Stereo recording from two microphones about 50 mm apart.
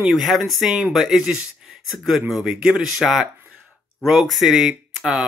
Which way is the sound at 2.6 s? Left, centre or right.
Right.